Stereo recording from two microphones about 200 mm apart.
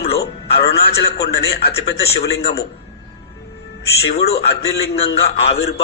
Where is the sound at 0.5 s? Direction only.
55° left (ahead or behind).